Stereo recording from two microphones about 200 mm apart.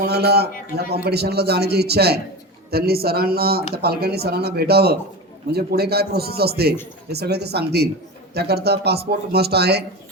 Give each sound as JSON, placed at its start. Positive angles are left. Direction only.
{"t": 0.1, "sound": "a man's voice", "side_deg": -55}